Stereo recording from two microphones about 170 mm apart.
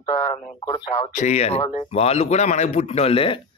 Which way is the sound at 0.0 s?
25° left (ahead or behind).